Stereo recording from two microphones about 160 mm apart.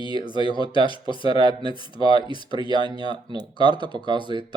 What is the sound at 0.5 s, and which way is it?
Speech, 30° left (ahead or behind).